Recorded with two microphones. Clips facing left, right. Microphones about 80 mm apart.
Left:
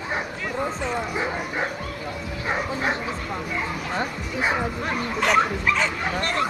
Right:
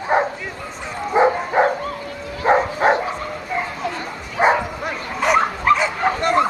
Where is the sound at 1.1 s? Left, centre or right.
Right.